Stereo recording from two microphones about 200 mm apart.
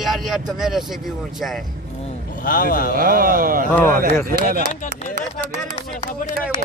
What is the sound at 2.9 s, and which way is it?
Speech, 45° right (ahead or behind).